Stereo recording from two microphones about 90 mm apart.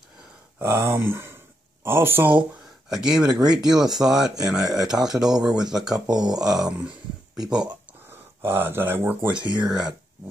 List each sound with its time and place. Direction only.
0.6 s speech: 30° right (ahead or behind)
2.9 s speech: 5° right (ahead or behind)
8.4 s speech: 25° right (ahead or behind)